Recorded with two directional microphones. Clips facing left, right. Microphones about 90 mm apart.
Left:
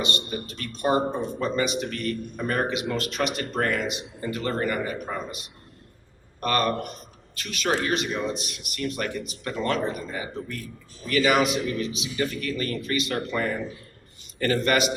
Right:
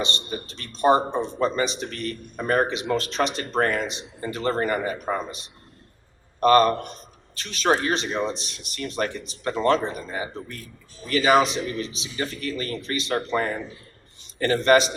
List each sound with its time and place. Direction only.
0.0 s speech: 30° right (ahead or behind)
6.4 s a man's voice: 35° right (ahead or behind)